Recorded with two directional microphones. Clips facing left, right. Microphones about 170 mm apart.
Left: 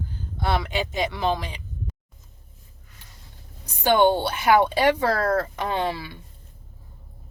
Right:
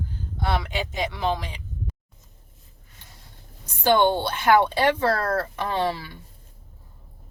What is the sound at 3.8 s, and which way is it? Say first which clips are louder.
Speech: left 1 dB; 15° left (ahead or behind).